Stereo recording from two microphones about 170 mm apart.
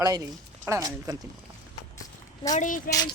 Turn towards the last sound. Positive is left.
turn(degrees=25)  # may be behind; listen again after turning